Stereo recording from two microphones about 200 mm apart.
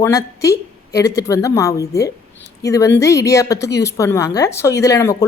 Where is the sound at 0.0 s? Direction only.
15° left (ahead or behind).